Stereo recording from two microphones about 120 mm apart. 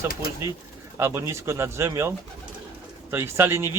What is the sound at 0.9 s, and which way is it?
Speech, 20° right (ahead or behind).